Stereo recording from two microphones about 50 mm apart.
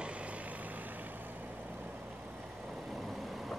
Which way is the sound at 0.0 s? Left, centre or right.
Right.